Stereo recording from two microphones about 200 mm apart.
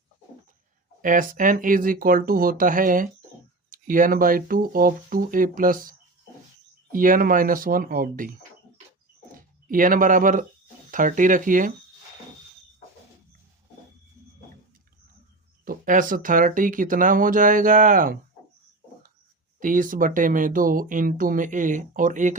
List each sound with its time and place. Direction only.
1.0 s speech: 45° right (ahead or behind)
6.9 s speech: 40° right (ahead or behind)
15.6 s speech: 45° right (ahead or behind)
19.5 s speech: 40° right (ahead or behind)